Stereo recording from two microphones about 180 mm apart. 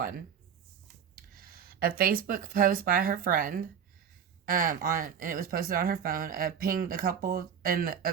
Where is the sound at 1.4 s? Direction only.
55° right (ahead or behind).